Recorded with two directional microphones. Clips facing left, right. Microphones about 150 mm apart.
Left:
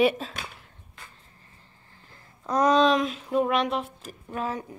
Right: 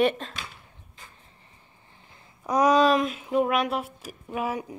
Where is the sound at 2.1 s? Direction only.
10° right (ahead or behind).